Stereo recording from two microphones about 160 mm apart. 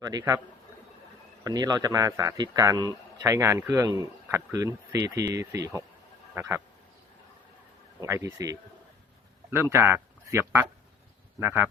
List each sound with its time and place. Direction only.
0.0 s a man's voice: 25° right (ahead or behind)
1.5 s a man's voice: 25° right (ahead or behind)
8.0 s a man's voice: 20° right (ahead or behind)